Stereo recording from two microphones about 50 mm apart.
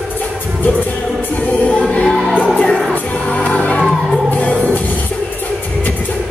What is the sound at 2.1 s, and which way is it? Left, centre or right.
Music, centre.